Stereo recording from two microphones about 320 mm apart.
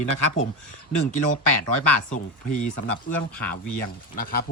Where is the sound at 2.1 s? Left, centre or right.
Left.